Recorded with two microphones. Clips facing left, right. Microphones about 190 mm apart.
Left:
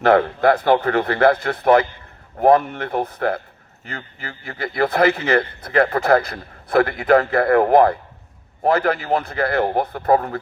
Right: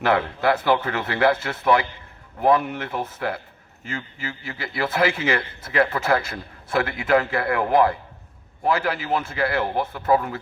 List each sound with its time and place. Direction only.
0.0 s a man's voice: 45° left (ahead or behind)